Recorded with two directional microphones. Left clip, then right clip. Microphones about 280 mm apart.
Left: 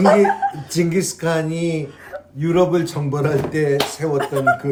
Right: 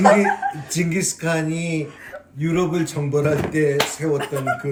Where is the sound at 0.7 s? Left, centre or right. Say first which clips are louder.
Left 4 dB; centre.